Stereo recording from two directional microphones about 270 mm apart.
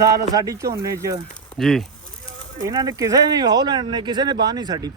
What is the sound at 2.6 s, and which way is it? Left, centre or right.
Speech, centre.